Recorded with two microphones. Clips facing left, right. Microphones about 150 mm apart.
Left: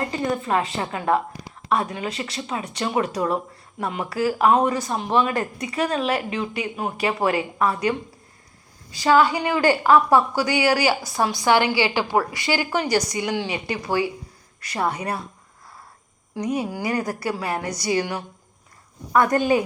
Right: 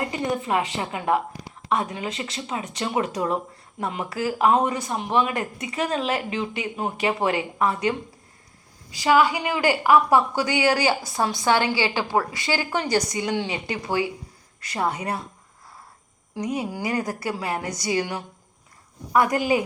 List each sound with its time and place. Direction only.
0.0 s a woman's voice: 20° right (ahead or behind)
16.3 s a woman's voice: 20° right (ahead or behind)